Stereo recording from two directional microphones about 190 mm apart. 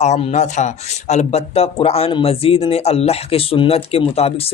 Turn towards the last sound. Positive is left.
turn(degrees=30)  # may be behind; listen again after turning